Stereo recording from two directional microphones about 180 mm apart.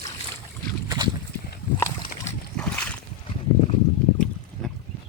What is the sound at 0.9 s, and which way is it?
Boat, 25° right (ahead or behind).